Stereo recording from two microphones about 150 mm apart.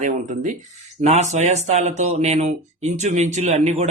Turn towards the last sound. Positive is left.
turn(degrees=-50)  # may be behind; listen again after turning